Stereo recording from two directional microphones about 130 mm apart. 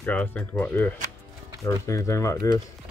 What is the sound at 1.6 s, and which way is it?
Speech, 25° left (ahead or behind).